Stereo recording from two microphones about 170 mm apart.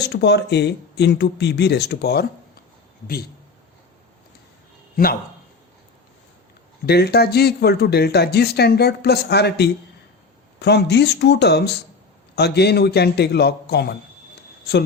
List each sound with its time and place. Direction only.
0.0 s speech: 85° left
6.8 s speech: 70° left (ahead or behind)